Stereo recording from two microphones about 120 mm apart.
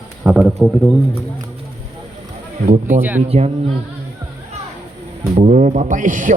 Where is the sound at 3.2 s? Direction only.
60° right (ahead or behind).